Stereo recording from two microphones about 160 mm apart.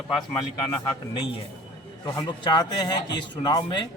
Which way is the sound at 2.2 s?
25° left (ahead or behind).